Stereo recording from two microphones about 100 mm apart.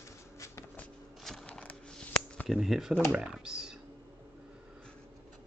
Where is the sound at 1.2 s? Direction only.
5° left (ahead or behind).